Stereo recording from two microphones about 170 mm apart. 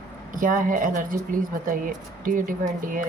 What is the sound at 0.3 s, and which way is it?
A woman's voice, 50° right (ahead or behind).